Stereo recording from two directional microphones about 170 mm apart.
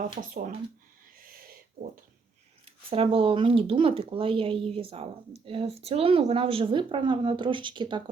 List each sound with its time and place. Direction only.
0.2 s speech: 50° right (ahead or behind)
2.6 s speech: 35° right (ahead or behind)